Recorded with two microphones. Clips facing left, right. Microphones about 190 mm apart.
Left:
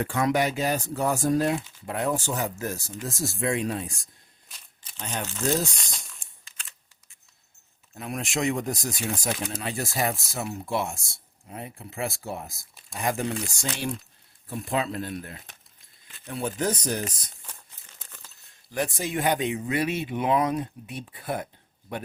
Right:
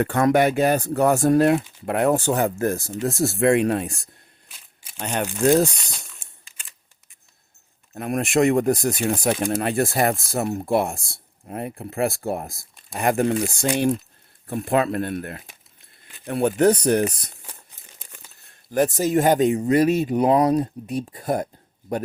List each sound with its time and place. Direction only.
0.0 s speech: 55° right (ahead or behind)
2.9 s speech: 65° right (ahead or behind)
4.4 s a sound: 10° right (ahead or behind)
4.9 s speech: 70° right (ahead or behind)
5.4 s speech: 60° right (ahead or behind)
5.7 s a sound: 5° right (ahead or behind)
7.9 s speech: 55° right (ahead or behind)
18.0 s crumpling: 15° right (ahead or behind)
18.7 s speech: 45° right (ahead or behind)